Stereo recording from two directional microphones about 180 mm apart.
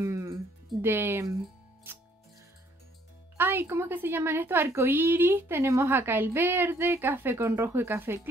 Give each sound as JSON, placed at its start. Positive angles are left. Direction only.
{"t": 0.0, "sound": "music", "side_deg": -15}
{"t": 0.8, "sound": "a woman's voice", "side_deg": -10}
{"t": 3.3, "sound": "a woman's voice", "side_deg": -10}